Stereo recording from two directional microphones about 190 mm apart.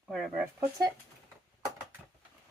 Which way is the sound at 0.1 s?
Centre (ahead or behind).